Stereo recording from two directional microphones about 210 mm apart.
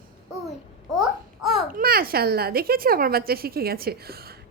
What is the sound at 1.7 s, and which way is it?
A woman's voice, 45° right (ahead or behind).